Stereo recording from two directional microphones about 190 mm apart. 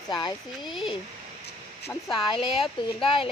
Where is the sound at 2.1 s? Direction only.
30° left (ahead or behind).